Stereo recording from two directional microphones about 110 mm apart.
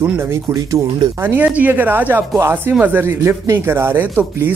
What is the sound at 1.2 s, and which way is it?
Speech, 15° right (ahead or behind).